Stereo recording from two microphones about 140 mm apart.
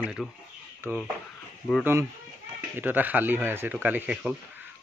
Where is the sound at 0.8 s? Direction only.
20° right (ahead or behind).